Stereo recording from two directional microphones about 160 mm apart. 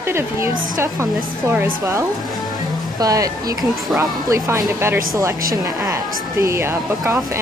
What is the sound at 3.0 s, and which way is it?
A woman's voice, 20° right (ahead or behind).